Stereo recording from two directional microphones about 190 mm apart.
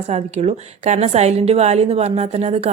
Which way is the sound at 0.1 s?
35° right (ahead or behind).